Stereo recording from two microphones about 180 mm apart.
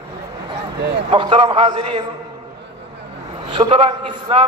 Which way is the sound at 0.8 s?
70° right (ahead or behind).